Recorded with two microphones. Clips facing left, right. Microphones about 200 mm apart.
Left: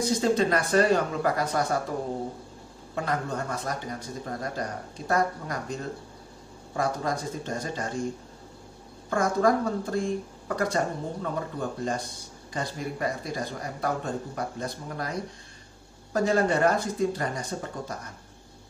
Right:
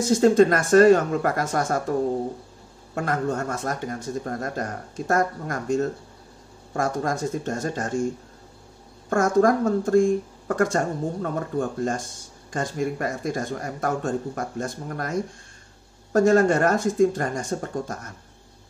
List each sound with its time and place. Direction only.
0.0 s speech: 50° right (ahead or behind)
2.9 s speech: 50° right (ahead or behind)
9.1 s speech: 50° right (ahead or behind)